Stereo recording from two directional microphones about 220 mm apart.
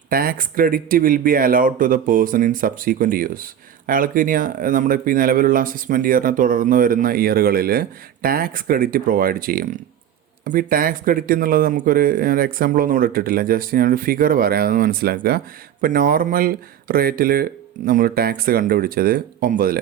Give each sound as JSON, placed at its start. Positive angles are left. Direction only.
{"t": 0.1, "sound": "speech", "side_deg": -40}